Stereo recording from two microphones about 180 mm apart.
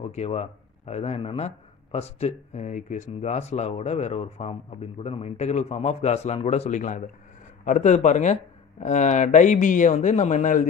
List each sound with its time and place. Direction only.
0.0 s speech: 35° left (ahead or behind)